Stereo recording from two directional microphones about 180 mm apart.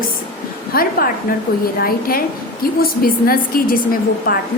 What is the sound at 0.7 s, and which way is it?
A woman's voice, 55° left (ahead or behind).